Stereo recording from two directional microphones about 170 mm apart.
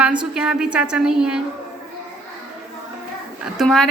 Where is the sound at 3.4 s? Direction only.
Centre (ahead or behind).